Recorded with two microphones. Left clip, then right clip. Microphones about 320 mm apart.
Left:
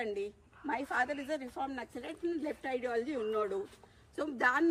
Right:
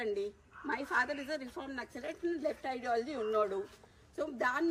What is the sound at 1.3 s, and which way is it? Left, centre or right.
Speech, centre.